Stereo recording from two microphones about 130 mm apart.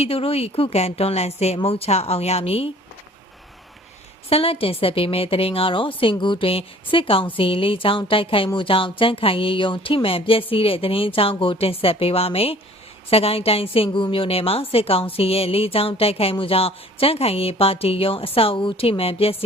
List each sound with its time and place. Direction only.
0.0 s a woman's voice: 50° left (ahead or behind)
4.3 s a woman's voice: 45° left (ahead or behind)